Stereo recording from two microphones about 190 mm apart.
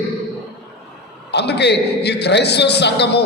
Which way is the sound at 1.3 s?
60° left (ahead or behind).